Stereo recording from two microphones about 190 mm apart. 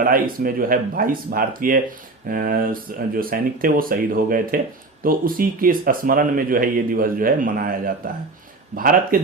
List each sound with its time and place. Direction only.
0.0 s speech: 45° right (ahead or behind)